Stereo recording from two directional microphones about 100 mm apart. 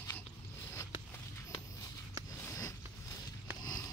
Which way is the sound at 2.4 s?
30° left (ahead or behind).